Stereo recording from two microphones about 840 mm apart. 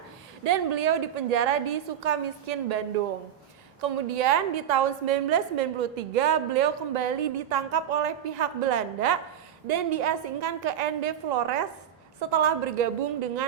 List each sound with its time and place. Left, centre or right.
0.4 s a woman's voice: right